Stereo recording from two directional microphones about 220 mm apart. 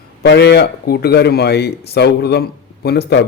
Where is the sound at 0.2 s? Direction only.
50° left (ahead or behind).